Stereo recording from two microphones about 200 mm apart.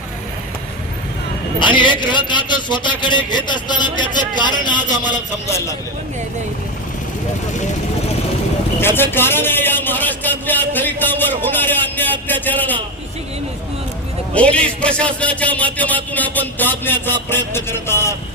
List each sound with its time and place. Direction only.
1.5 s a man's voice: 25° left (ahead or behind)
8.8 s a man's voice: 10° left (ahead or behind)
14.3 s a man's voice: 5° left (ahead or behind)